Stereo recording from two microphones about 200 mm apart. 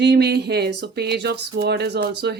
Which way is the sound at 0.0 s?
55° right (ahead or behind).